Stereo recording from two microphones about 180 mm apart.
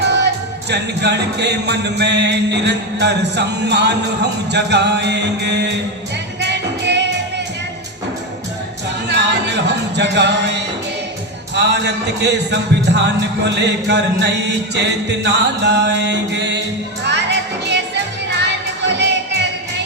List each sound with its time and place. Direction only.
0.0 s music: 75° right (ahead or behind)
9.0 s music: 70° right (ahead or behind)